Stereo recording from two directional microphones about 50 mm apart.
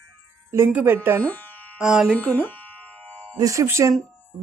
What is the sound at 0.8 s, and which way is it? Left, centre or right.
Speech, right.